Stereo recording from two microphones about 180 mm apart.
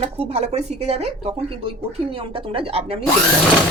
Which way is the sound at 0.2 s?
35° right (ahead or behind).